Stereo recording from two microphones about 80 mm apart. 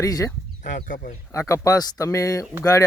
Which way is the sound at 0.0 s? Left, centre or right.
Left.